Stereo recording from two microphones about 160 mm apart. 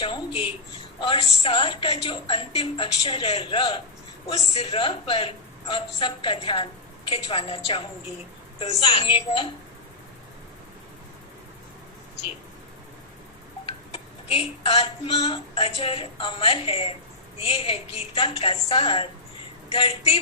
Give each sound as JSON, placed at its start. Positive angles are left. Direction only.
{"t": 0.0, "sound": "a woman's voice", "side_deg": 30}
{"t": 13.7, "sound": "a sound", "side_deg": 35}
{"t": 17.4, "sound": "a woman's voice", "side_deg": 35}